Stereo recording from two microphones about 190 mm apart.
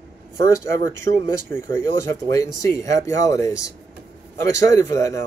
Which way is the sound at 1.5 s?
15° left (ahead or behind).